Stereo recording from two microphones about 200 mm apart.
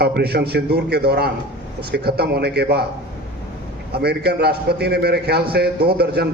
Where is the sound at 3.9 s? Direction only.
55° right (ahead or behind).